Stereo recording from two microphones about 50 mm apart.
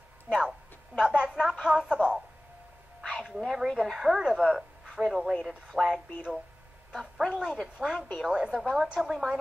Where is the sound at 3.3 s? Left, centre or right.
Centre.